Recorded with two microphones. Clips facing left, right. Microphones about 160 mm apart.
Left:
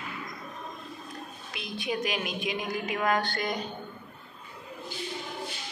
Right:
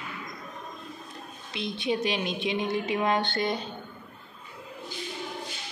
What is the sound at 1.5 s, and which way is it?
A woman's voice, 25° right (ahead or behind).